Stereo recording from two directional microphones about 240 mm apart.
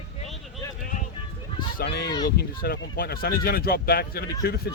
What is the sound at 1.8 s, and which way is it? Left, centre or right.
Speech, left.